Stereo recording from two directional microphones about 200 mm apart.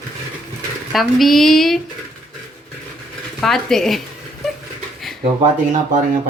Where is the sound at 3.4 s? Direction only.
Centre (ahead or behind).